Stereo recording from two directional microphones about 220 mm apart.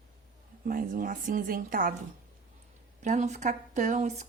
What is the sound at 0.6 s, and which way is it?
Speech, 40° right (ahead or behind).